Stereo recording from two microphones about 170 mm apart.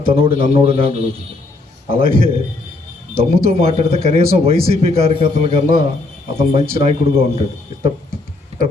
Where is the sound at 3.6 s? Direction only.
35° right (ahead or behind).